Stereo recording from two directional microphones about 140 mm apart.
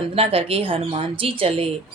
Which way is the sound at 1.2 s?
40° right (ahead or behind).